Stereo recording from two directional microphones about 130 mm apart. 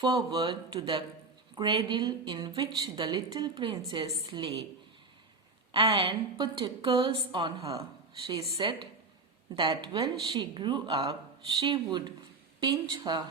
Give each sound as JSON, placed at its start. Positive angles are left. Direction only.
{"t": 0.0, "sound": "speech", "side_deg": -30}
{"t": 3.8, "sound": "speech", "side_deg": -25}
{"t": 4.4, "sound": "a woman's voice", "side_deg": -45}
{"t": 5.7, "sound": "a woman's voice", "side_deg": -45}